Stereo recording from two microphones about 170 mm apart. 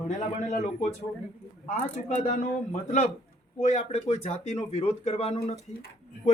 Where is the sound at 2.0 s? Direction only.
40° left (ahead or behind).